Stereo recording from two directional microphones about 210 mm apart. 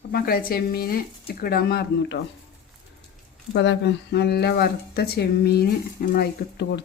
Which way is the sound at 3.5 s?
55° left (ahead or behind).